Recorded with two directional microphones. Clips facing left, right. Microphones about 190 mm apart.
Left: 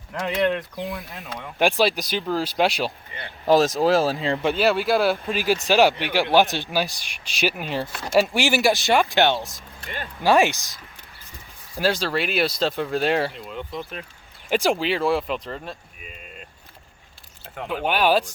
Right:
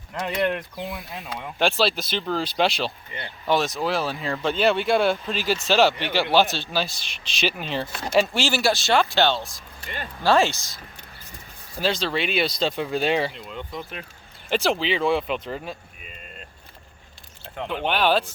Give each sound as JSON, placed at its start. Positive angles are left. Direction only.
{"t": 0.4, "sound": "speech", "side_deg": -10}
{"t": 1.5, "sound": "speech", "side_deg": 15}
{"t": 3.4, "sound": "speech", "side_deg": 35}
{"t": 4.4, "sound": "speech", "side_deg": 5}
{"t": 11.8, "sound": "speech", "side_deg": 5}
{"t": 17.5, "sound": "speech", "side_deg": 5}